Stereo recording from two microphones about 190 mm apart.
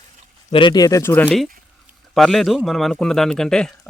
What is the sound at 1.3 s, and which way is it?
Speech, centre (ahead or behind).